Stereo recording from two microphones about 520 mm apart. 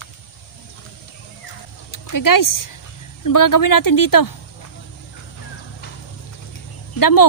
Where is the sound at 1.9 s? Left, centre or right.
Left.